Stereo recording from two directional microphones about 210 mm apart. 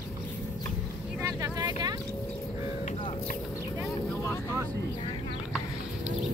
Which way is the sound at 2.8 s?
25° left (ahead or behind).